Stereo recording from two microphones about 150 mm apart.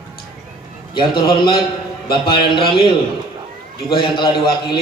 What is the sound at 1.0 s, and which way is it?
A man's voice, 30° left (ahead or behind).